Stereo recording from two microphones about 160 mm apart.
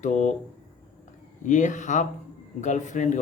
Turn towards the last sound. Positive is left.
turn(degrees=50)  # may be behind; listen again after turning